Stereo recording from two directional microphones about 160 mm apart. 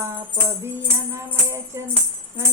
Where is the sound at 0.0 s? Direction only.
15° right (ahead or behind).